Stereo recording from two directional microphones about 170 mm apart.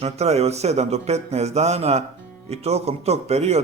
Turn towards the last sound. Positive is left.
turn(degrees=-40)  # may be behind; listen again after turning